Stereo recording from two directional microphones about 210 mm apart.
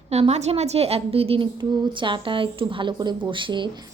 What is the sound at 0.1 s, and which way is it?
A woman's voice, 30° right (ahead or behind).